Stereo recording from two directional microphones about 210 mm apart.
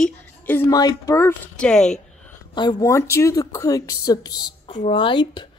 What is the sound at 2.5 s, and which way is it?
Speech, 20° left (ahead or behind).